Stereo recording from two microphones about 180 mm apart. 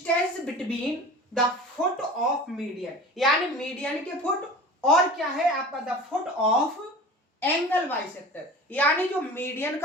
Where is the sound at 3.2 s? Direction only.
Centre (ahead or behind).